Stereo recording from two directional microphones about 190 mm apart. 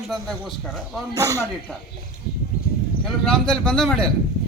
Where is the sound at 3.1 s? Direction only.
Centre (ahead or behind).